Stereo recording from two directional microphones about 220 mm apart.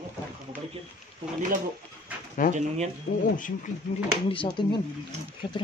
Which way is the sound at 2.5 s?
30° right (ahead or behind).